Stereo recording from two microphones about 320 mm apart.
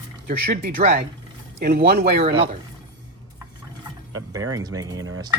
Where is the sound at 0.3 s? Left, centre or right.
Right.